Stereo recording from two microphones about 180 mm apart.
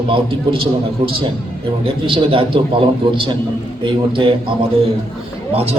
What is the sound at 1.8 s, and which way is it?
Speech, 30° right (ahead or behind).